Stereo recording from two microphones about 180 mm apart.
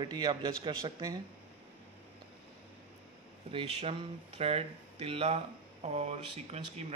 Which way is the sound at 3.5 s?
35° right (ahead or behind).